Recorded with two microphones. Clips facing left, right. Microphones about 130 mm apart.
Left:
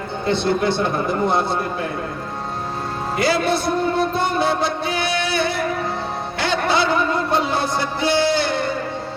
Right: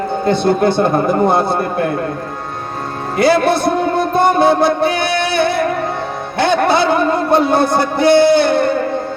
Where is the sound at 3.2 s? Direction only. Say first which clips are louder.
Right 7 dB; 55° right (ahead or behind).